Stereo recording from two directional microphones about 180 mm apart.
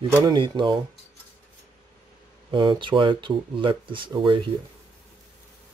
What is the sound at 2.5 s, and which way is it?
Speech, 25° right (ahead or behind).